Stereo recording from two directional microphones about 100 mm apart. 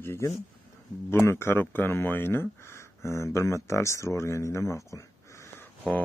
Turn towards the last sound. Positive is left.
turn(degrees=30)  # may be behind; listen again after turning